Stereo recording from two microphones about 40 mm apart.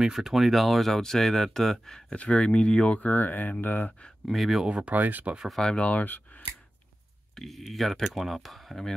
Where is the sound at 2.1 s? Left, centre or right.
Left.